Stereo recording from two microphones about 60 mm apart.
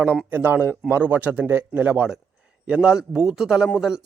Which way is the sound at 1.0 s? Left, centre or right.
Right.